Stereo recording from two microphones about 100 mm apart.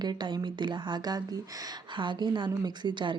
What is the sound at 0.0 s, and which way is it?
Speech, 45° right (ahead or behind).